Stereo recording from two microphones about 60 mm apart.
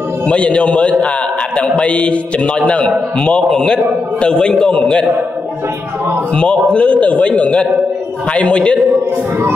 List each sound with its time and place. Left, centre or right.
0.3 s a man's voice: centre
6.3 s a man's voice: centre